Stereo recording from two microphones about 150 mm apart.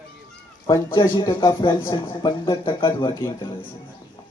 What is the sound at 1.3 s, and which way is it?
Speech, 35° left (ahead or behind).